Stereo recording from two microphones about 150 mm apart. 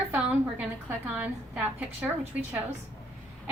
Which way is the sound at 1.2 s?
10° right (ahead or behind).